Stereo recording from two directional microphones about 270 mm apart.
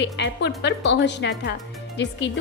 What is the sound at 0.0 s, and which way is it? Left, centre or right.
A woman's voice, left.